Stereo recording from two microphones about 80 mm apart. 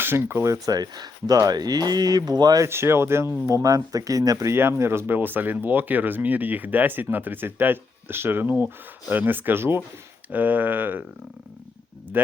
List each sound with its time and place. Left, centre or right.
0.0 s speech: right
2.6 s speech: right
3.4 s speech: right
4.5 s speech: right
12.1 s speech: right